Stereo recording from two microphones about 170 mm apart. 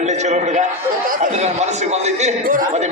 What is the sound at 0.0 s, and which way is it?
A man's voice, 40° right (ahead or behind).